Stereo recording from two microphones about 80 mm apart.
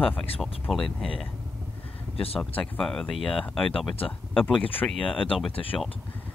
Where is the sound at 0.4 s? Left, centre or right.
Centre.